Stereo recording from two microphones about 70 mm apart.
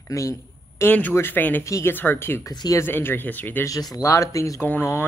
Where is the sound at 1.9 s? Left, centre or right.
Left.